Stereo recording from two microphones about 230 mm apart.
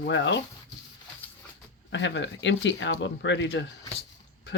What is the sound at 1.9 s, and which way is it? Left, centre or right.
Speech, left.